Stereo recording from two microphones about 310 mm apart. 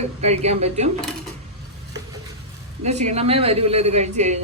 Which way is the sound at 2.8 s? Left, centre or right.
Right.